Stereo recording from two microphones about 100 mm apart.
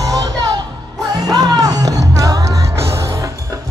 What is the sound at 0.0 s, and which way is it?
Music, 40° right (ahead or behind).